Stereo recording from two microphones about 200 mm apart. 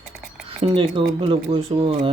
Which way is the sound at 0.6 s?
30° right (ahead or behind).